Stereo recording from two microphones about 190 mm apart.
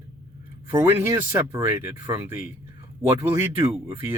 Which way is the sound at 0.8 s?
10° right (ahead or behind).